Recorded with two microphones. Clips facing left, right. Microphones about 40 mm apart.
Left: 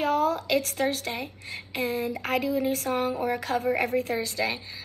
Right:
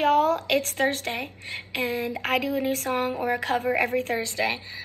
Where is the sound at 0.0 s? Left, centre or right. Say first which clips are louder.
Right 4 dB; right.